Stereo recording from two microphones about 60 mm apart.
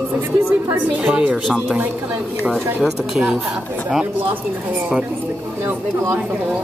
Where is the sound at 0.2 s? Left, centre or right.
Right; by 1.8 s centre.